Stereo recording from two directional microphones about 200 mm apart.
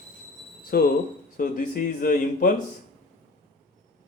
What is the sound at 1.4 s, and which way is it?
Speech, 45° left (ahead or behind).